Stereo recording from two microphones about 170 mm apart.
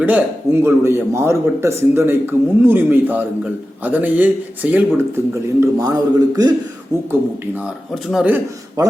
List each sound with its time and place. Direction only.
0.0 s a man's voice: 10° right (ahead or behind)
7.1 s a man's voice: 10° right (ahead or behind)